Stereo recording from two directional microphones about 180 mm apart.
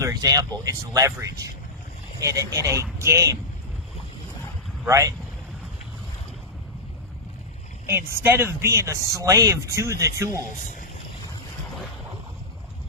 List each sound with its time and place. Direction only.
0.0 s speech: 20° right (ahead or behind)
4.9 s speech: 15° right (ahead or behind)
7.9 s speech: 15° right (ahead or behind)